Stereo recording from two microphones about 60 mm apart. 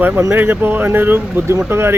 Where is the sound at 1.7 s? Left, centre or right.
Right.